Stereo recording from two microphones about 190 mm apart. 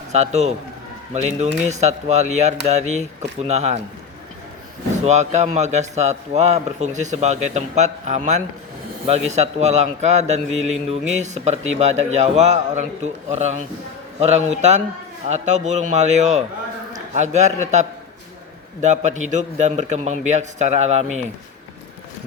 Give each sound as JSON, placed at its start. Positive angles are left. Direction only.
{"t": 0.1, "sound": "a man's voice", "side_deg": -35}
{"t": 5.0, "sound": "a man's voice", "side_deg": -35}